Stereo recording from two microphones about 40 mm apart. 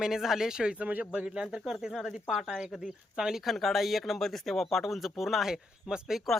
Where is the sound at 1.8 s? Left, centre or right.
Centre.